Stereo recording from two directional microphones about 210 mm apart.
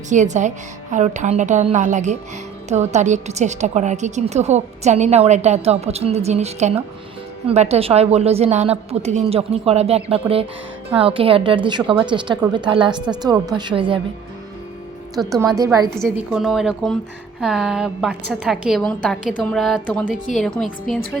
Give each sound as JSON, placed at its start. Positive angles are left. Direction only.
{"t": 0.1, "sound": "a woman's voice", "side_deg": -35}
{"t": 15.4, "sound": "a woman's voice", "side_deg": -15}
{"t": 16.0, "sound": "a woman's voice", "side_deg": 0}